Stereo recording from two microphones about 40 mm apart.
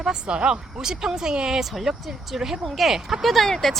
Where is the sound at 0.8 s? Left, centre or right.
Centre.